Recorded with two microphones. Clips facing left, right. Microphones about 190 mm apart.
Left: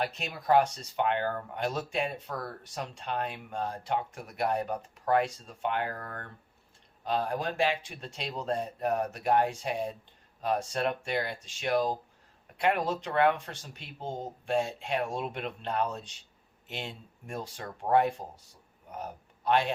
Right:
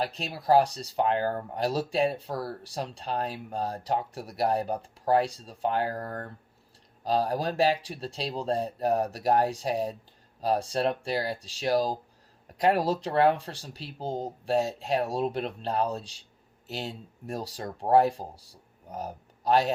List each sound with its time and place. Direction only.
0.0 s speech: 35° right (ahead or behind)